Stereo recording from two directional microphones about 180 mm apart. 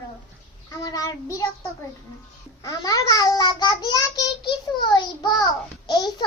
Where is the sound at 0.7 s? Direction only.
20° left (ahead or behind).